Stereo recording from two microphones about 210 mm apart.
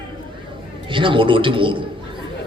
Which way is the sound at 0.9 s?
25° right (ahead or behind).